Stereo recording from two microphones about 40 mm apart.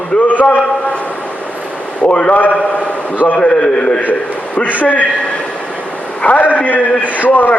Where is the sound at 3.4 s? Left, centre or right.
Left.